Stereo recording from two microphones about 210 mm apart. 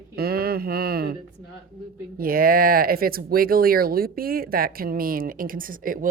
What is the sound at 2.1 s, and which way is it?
Speech, 45° right (ahead or behind).